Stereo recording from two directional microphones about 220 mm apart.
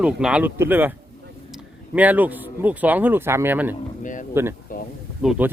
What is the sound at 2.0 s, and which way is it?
Speech, 5° right (ahead or behind).